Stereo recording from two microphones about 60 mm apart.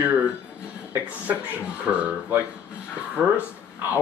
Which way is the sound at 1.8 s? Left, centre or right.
Centre.